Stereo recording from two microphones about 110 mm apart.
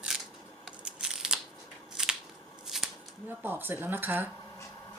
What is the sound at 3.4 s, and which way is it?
Speech, 20° right (ahead or behind).